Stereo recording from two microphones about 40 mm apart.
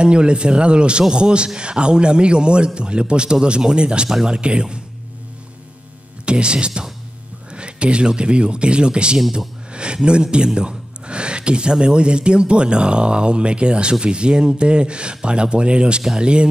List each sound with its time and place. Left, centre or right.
0.0 s speech: right
6.2 s speech: right